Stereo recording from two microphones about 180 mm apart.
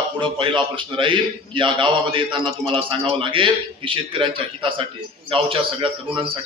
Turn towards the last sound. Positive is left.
turn(degrees=-30)  # may be behind; listen again after turning